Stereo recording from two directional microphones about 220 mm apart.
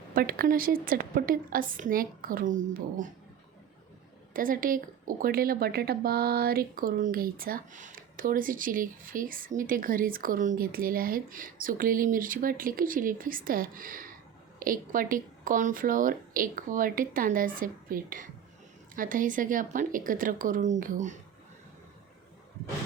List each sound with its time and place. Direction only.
0.1 s speech: 40° right (ahead or behind)
4.4 s speech: 40° right (ahead or behind)